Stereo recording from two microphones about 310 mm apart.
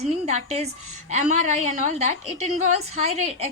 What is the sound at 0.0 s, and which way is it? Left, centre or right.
A woman's voice, right.